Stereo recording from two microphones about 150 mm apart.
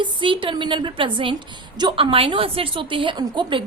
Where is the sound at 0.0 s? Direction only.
35° right (ahead or behind).